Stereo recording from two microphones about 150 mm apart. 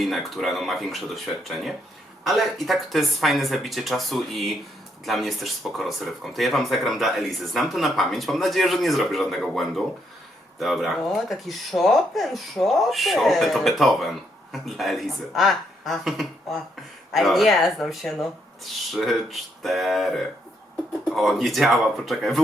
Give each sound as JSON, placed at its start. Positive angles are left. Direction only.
{"t": 0.0, "sound": "speech", "side_deg": 0}